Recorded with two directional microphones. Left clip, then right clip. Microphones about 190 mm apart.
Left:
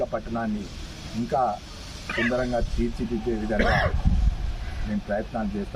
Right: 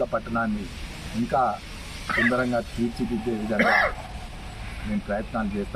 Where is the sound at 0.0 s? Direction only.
5° left (ahead or behind).